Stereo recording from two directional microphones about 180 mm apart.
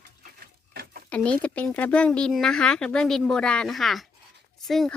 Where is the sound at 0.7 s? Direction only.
55° right (ahead or behind).